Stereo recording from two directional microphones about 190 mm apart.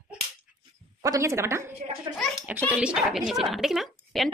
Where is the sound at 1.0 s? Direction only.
15° right (ahead or behind).